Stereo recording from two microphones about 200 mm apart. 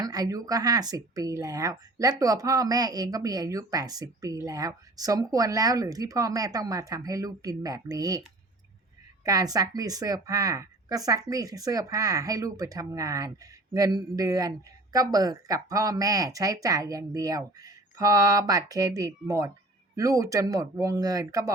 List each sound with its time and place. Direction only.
0.0 s speech: 20° right (ahead or behind)
9.2 s speech: 20° right (ahead or behind)